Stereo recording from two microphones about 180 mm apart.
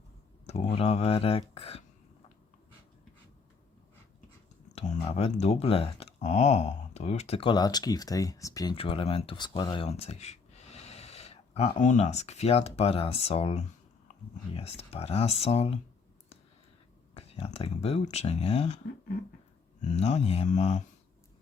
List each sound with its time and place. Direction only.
0.4 s a sound: 40° left (ahead or behind)
0.8 s speech: 35° left (ahead or behind)
4.7 s speech: 35° left (ahead or behind); by 8.7 s 20° left (ahead or behind)
8.7 s speech: 30° left (ahead or behind)
17.2 s speech: 35° left (ahead or behind)
19.8 s speech: 40° left (ahead or behind)